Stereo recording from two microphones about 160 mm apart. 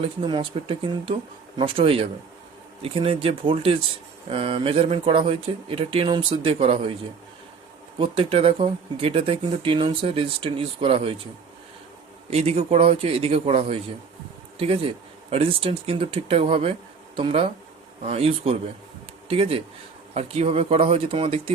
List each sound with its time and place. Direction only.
0.0 s speech: 30° right (ahead or behind)
7.9 s speech: 35° right (ahead or behind)
12.3 s speech: 40° right (ahead or behind)